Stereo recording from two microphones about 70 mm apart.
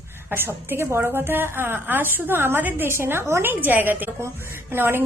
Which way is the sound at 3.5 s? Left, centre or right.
Right.